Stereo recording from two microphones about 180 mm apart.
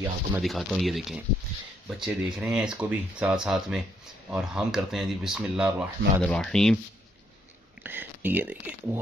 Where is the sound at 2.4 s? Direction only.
5° right (ahead or behind).